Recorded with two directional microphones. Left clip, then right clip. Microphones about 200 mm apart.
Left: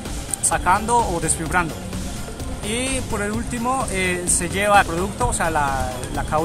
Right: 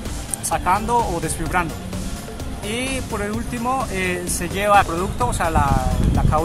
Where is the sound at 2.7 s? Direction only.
5° left (ahead or behind).